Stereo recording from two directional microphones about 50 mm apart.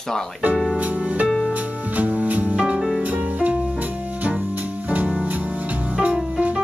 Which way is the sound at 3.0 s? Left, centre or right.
Right.